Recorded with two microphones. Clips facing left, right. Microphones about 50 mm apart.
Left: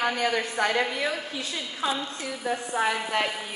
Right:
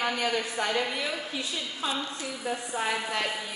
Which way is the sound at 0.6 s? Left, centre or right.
Left.